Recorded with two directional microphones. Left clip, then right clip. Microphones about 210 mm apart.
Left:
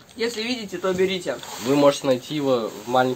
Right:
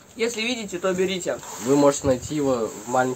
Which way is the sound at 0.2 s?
10° right (ahead or behind).